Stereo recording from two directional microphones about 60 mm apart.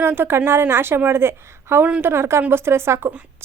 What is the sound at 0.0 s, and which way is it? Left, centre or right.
A woman's voice, right.